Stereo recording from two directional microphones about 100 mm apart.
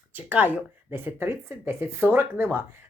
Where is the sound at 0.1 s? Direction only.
15° right (ahead or behind).